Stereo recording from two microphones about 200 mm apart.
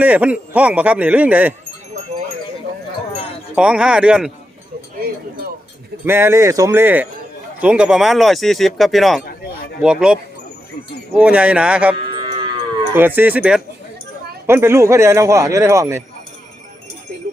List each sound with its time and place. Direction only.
0.0 s speech: 5° right (ahead or behind)
3.5 s speech: 5° right (ahead or behind)
4.9 s a sound: 50° right (ahead or behind)
6.1 s speech: 10° right (ahead or behind)
12.1 s moo: 25° right (ahead or behind)
13.0 s speech: 10° right (ahead or behind)